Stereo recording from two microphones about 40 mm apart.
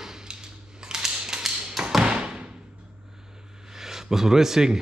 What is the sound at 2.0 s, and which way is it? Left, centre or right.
Thump, right.